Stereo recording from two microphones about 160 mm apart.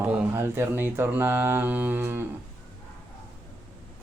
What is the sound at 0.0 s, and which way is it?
Speech, 10° right (ahead or behind).